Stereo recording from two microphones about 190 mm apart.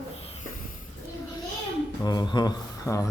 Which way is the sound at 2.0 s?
20° left (ahead or behind).